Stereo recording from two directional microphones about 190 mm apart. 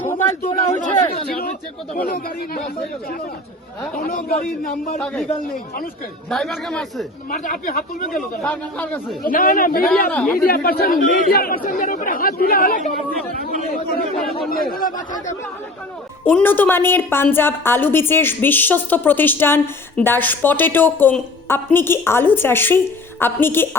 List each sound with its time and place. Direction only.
0.0 s a sound: 10° left (ahead or behind)
0.4 s a man's voice: 40° left (ahead or behind)
2.0 s speech: 50° left (ahead or behind)
3.9 s speech: 50° left (ahead or behind)
4.9 s a woman's voice: 10° left (ahead or behind)
6.3 s speech: centre (ahead or behind)
7.3 s speech: 45° left (ahead or behind)
8.4 s a woman's voice: 10° left (ahead or behind)
9.2 s speech: 50° left (ahead or behind)
10.1 s a woman's voice: 5° left (ahead or behind)
10.4 s speech: 50° left (ahead or behind)
16.2 s a woman's voice: 10° left (ahead or behind)